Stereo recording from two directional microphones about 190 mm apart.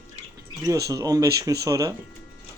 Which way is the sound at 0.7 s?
20° right (ahead or behind).